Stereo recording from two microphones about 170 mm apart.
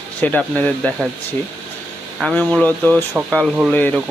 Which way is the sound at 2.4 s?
10° left (ahead or behind).